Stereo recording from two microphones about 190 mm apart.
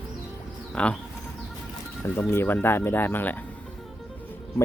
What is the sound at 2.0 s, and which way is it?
Speech, 10° left (ahead or behind).